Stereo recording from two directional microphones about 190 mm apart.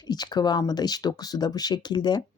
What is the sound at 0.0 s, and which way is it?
Speech, 20° left (ahead or behind).